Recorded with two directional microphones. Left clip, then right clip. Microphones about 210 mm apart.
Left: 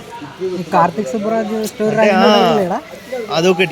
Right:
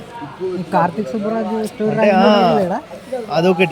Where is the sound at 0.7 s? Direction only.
35° left (ahead or behind).